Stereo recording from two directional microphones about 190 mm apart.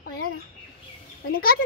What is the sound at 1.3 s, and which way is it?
Speech, 50° left (ahead or behind).